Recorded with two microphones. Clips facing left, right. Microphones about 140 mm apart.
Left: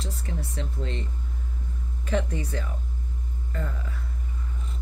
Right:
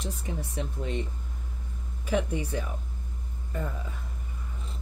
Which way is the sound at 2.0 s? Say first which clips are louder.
Even; 10° right (ahead or behind).